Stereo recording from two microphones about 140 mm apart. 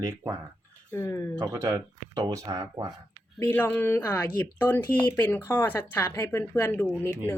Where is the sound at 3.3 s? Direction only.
15° left (ahead or behind).